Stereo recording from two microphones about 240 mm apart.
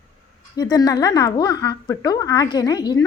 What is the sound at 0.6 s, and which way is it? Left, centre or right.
A woman's voice, centre.